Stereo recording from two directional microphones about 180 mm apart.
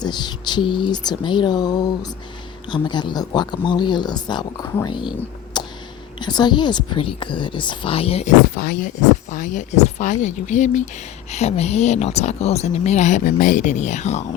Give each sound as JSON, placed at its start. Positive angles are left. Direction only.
{"t": 0.0, "sound": "speech", "side_deg": 25}
{"t": 5.5, "sound": "a sound", "side_deg": 25}
{"t": 6.1, "sound": "speech", "side_deg": 25}
{"t": 8.5, "sound": "speech", "side_deg": 55}
{"t": 9.3, "sound": "speech", "side_deg": 45}